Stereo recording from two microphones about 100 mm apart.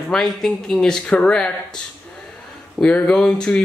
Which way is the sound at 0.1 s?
5° left (ahead or behind).